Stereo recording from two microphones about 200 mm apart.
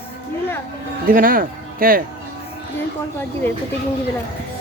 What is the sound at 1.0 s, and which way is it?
Speech, 45° right (ahead or behind).